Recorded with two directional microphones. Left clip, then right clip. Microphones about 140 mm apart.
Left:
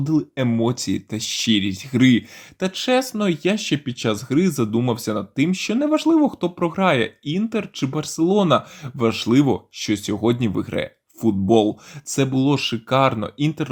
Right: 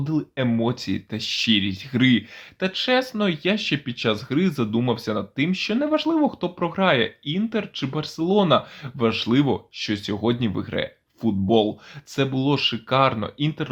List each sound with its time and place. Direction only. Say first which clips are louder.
0.0 s speech: left 3 dB; 35° left (ahead or behind)